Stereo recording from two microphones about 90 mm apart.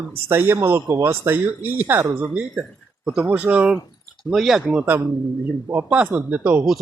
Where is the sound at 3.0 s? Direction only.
10° right (ahead or behind).